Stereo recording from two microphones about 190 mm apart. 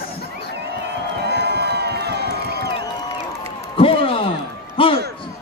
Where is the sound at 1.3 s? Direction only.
60° right (ahead or behind).